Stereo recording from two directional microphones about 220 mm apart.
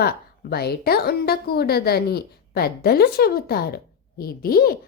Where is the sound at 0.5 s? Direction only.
45° left (ahead or behind).